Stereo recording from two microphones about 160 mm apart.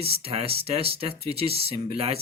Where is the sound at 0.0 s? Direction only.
40° right (ahead or behind).